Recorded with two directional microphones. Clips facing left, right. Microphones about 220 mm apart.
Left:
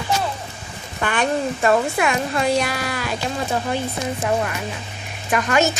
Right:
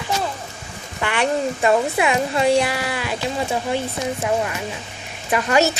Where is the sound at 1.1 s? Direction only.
20° right (ahead or behind).